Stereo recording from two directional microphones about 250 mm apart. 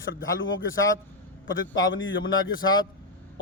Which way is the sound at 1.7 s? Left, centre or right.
Left.